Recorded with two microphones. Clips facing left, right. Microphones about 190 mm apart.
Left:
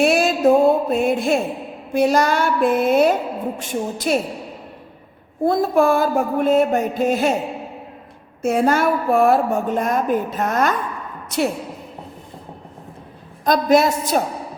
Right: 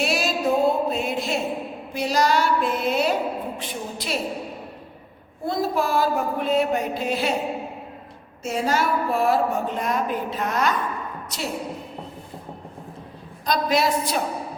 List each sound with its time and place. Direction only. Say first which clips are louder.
0.0 s music: left 8 dB; 55° left (ahead or behind)
1.9 s a woman's voice: left 5 dB; 55° left (ahead or behind)
5.5 s a woman's voice: left 7 dB; 50° left (ahead or behind)
8.4 s a woman's voice: left 6 dB; 55° left (ahead or behind)
13.4 s a woman's voice: left 7 dB; 50° left (ahead or behind)